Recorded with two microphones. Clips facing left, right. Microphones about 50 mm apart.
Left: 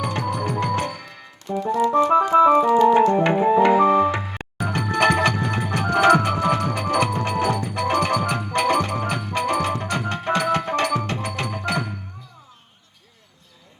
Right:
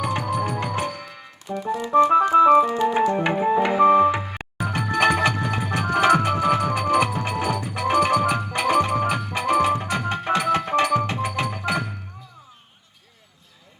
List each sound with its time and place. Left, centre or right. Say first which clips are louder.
0.0 s music: right 1 dB; centre
2.3 s organ: left 2 dB; centre
3.6 s music: right 1 dB; centre